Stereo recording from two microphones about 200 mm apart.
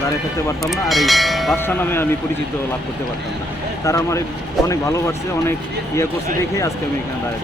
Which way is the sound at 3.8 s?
15° left (ahead or behind).